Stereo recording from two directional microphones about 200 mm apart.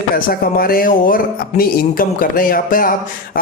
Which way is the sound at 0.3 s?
45° left (ahead or behind).